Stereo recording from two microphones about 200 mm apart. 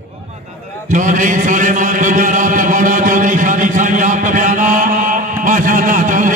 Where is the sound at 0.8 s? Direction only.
40° right (ahead or behind).